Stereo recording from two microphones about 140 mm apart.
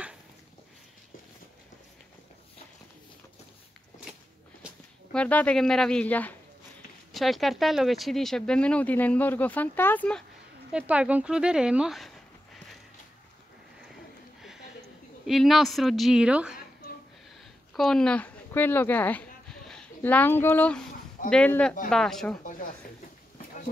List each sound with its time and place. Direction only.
5.1 s speech: 10° left (ahead or behind)
7.1 s speech: centre (ahead or behind)
10.7 s speech: 10° right (ahead or behind)
15.2 s speech: centre (ahead or behind)
17.7 s speech: 5° left (ahead or behind)
22.4 s a sound: 70° left (ahead or behind)